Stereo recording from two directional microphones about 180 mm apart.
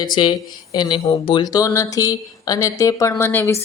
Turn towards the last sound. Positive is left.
turn(degrees=15)  # may be behind; listen again after turning